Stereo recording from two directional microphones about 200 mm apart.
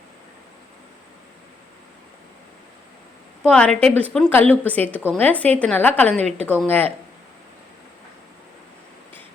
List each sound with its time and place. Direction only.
3.4 s a woman's voice: 5° left (ahead or behind)
6.1 s a woman's voice: 35° right (ahead or behind)
6.6 s a woman's voice: 10° left (ahead or behind)